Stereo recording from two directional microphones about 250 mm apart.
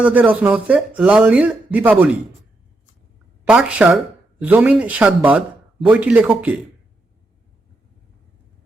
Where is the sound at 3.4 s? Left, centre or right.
Centre.